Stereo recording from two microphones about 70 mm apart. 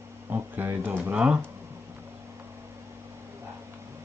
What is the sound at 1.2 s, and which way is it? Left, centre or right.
Speech, centre.